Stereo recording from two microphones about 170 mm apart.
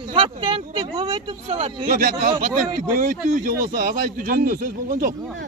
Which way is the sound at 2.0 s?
55° right (ahead or behind).